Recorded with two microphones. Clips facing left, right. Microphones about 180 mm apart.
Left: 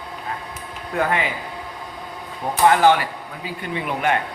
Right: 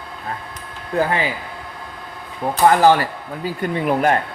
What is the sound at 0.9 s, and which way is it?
Speech, 35° right (ahead or behind).